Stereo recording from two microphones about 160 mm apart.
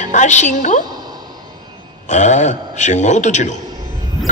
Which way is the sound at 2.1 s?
50° left (ahead or behind).